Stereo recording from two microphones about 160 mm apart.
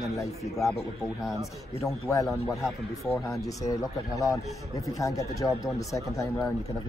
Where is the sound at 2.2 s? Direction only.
Centre (ahead or behind).